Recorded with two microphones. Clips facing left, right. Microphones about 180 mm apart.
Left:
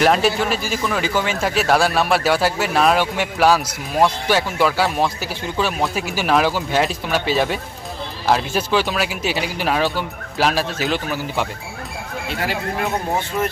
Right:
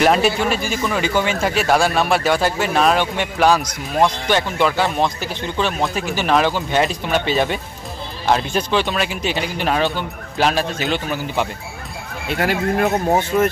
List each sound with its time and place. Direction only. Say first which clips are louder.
0.0 s speech: right 1 dB; centre (ahead or behind)
12.3 s speech: right 6 dB; 55° right (ahead or behind)